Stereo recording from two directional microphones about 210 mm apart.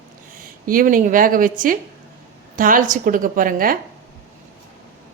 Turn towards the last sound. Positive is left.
turn(degrees=-40)  # may be behind; listen again after turning